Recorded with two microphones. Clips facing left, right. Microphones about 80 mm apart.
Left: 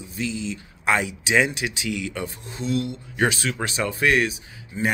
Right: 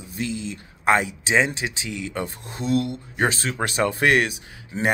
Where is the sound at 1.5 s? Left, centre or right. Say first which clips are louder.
Left 2 dB; right.